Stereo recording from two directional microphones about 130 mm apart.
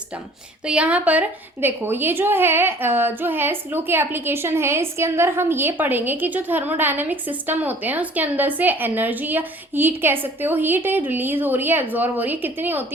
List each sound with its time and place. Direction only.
0.6 s a woman's voice: 10° right (ahead or behind)